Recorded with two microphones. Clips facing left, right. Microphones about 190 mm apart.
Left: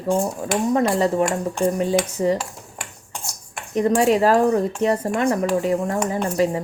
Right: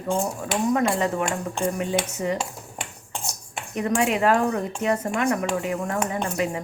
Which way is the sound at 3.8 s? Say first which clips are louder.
Left 6 dB; 35° left (ahead or behind).